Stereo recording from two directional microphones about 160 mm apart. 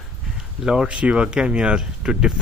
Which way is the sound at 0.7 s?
5° right (ahead or behind).